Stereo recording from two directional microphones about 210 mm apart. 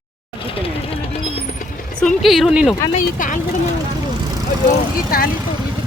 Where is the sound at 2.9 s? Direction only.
35° left (ahead or behind).